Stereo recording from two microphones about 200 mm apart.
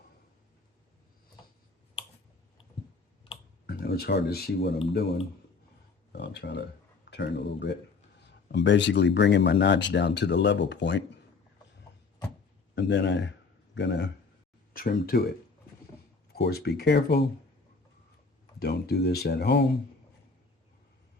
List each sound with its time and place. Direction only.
3.7 s speech: 50° left (ahead or behind)
6.1 s speech: 60° left (ahead or behind)
12.7 s speech: 60° left (ahead or behind)
14.7 s speech: 45° left (ahead or behind)
16.3 s speech: 50° left (ahead or behind)
18.6 s speech: 55° left (ahead or behind)